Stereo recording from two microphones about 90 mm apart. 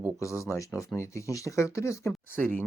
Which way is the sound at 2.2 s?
25° left (ahead or behind).